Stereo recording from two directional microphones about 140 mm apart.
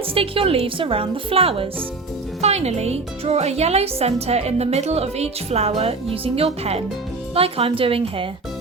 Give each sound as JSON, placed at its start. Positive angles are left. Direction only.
{"t": 0.1, "sound": "a woman's voice", "side_deg": -40}